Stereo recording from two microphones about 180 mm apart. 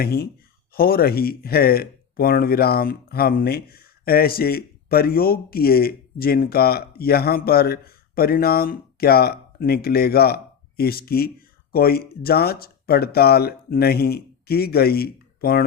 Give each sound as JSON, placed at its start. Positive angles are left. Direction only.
{"t": 0.0, "sound": "speech", "side_deg": 60}